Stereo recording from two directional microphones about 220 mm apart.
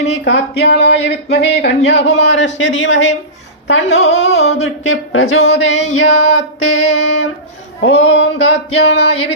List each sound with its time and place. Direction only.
0.1 s speech: 50° left (ahead or behind)
2.2 s female singing: 55° left (ahead or behind)
3.7 s speech: 55° left (ahead or behind)
4.6 s female singing: 60° left (ahead or behind)